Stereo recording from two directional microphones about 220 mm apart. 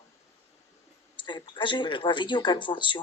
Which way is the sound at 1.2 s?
20° left (ahead or behind).